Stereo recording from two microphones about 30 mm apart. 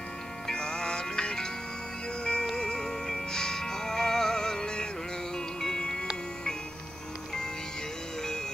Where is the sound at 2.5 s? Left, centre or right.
Left.